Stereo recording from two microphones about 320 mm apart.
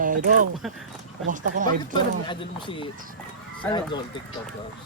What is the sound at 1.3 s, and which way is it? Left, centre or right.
Speech, right.